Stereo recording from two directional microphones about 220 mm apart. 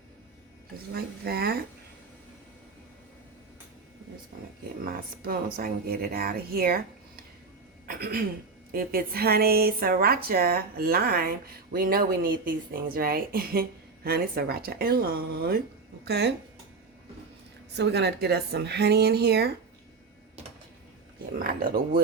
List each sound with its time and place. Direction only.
0.9 s a woman's voice: 45° right (ahead or behind)
4.3 s a woman's voice: 40° right (ahead or behind)
17.7 s a woman's voice: 50° right (ahead or behind)
21.3 s speech: 40° right (ahead or behind)